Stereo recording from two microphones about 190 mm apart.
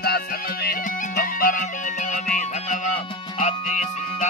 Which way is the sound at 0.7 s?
50° left (ahead or behind).